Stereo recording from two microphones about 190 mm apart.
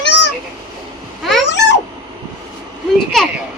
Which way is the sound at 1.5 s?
70° left (ahead or behind).